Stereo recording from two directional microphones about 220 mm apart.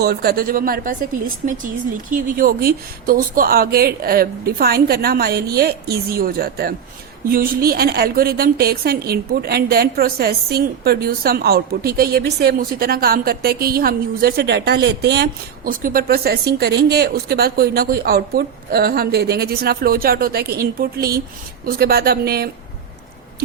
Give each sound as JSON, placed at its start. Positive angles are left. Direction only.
{"t": 0.0, "sound": "a woman's voice", "side_deg": -45}